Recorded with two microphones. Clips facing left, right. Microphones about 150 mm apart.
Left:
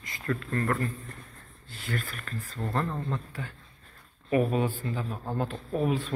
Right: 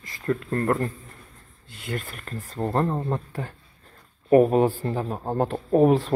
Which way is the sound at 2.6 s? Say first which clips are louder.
Right 7 dB; 40° right (ahead or behind).